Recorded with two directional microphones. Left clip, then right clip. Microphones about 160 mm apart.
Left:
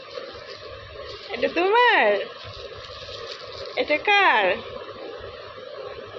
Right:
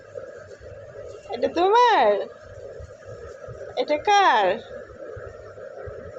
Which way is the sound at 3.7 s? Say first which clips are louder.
Even; 15° right (ahead or behind).